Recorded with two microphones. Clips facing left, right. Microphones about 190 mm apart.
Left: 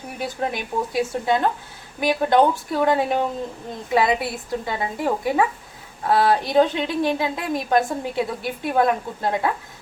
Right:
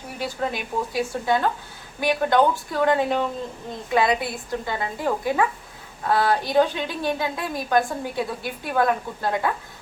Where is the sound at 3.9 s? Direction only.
20° left (ahead or behind).